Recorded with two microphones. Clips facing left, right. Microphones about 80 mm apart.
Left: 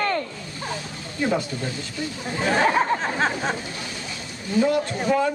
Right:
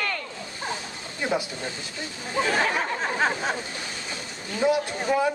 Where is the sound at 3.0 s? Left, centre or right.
Centre.